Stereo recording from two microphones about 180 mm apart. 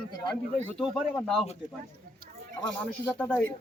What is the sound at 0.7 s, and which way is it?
Speech, centre (ahead or behind).